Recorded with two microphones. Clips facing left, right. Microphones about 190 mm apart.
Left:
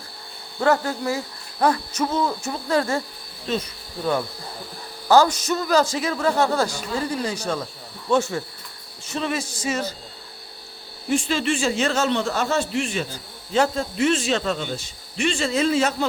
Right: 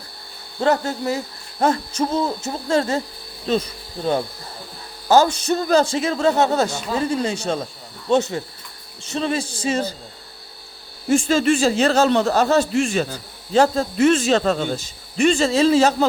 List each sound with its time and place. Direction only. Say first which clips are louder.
0.6 s a man's voice: right 1 dB; 20° right (ahead or behind)
3.5 s speech: right 5 dB; 35° right (ahead or behind)
5.0 s a man's voice: right 1 dB; 20° right (ahead or behind)
11.1 s speech: right 6 dB; 45° right (ahead or behind)